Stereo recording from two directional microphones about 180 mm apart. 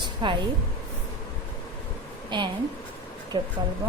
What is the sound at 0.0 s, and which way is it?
Hair dryer, 25° right (ahead or behind).